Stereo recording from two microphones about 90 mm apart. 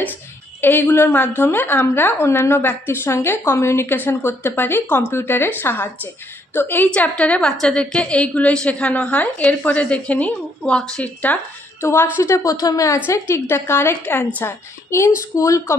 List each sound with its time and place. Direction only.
0.6 s a woman's voice: 25° left (ahead or behind)
11.8 s a woman's voice: 30° left (ahead or behind)